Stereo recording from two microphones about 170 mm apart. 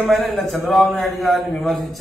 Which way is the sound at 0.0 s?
Centre (ahead or behind).